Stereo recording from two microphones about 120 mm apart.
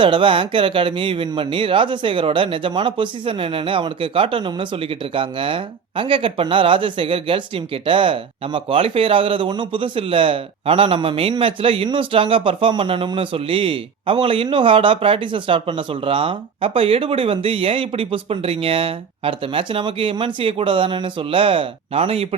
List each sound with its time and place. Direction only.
0.0 s speech: 45° right (ahead or behind)